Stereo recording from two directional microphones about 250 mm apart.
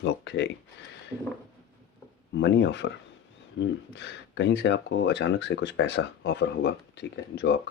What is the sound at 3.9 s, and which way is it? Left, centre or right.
Speech, left.